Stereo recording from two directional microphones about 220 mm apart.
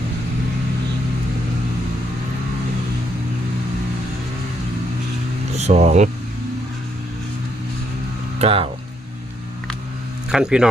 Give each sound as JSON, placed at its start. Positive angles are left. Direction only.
{"t": 5.5, "sound": "speech", "side_deg": -30}
{"t": 8.4, "sound": "speech", "side_deg": -25}
{"t": 10.3, "sound": "speech", "side_deg": -5}